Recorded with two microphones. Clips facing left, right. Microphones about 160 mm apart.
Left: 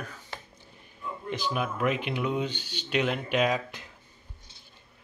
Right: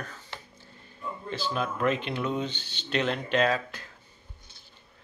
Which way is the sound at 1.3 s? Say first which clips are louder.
Even; 15° left (ahead or behind).